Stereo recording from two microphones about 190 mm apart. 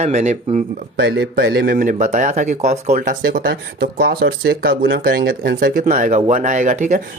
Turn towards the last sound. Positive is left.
turn(degrees=-40)  # may be behind; listen again after turning